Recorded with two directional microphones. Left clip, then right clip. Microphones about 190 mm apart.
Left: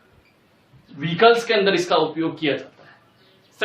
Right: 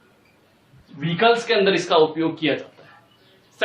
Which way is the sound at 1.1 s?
10° right (ahead or behind).